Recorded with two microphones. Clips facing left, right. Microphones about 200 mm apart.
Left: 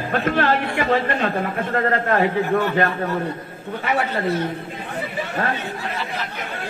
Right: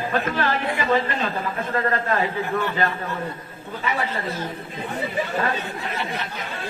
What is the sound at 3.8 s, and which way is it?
Speech, 65° left (ahead or behind).